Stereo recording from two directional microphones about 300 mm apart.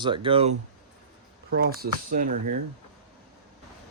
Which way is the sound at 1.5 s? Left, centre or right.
Right.